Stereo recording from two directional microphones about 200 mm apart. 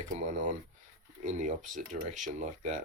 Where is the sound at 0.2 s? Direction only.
40° right (ahead or behind).